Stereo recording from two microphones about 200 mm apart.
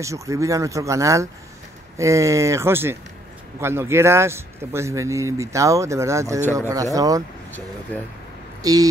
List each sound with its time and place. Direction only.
0.0 s speech: 15° right (ahead or behind)
7.9 s speech: 10° left (ahead or behind)
8.6 s speech: 20° right (ahead or behind)